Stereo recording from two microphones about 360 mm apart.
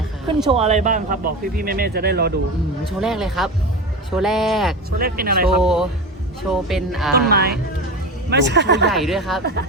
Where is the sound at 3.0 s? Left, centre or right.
Centre.